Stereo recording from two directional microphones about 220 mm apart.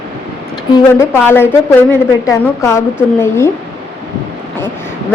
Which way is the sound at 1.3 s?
10° left (ahead or behind).